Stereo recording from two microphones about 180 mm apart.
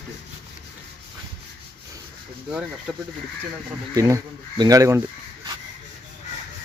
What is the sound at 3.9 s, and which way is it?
Speech, 20° right (ahead or behind).